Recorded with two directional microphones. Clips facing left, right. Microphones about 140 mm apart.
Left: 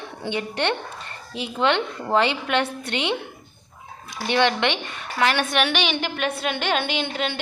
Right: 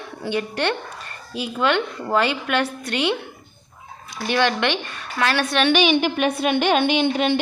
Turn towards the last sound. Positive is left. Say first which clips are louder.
# right 7 dB
turn(degrees=-20)  # may be behind; listen again after turning